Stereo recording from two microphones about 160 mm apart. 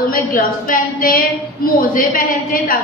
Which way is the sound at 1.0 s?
65° left (ahead or behind).